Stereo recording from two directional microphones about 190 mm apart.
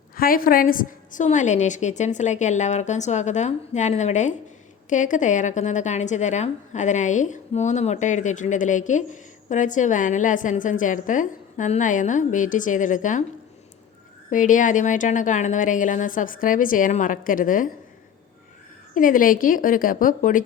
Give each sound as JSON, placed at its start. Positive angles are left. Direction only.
{"t": 0.2, "sound": "a woman's voice", "side_deg": 50}
{"t": 14.3, "sound": "speech", "side_deg": 40}
{"t": 18.9, "sound": "speech", "side_deg": 45}